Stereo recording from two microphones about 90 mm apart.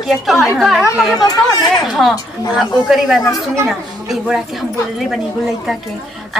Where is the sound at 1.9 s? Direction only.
Centre (ahead or behind).